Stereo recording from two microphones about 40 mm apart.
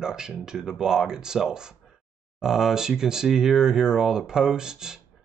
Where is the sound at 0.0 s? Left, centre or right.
Centre.